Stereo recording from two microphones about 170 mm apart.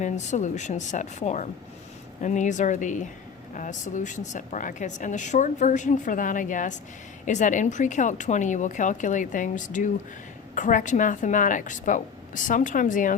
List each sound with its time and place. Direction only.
0.0 s a woman's voice: 45° left (ahead or behind)